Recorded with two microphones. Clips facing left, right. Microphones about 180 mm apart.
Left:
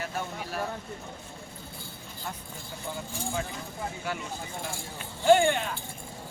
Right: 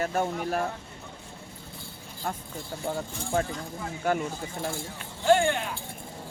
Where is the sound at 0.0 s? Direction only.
50° right (ahead or behind).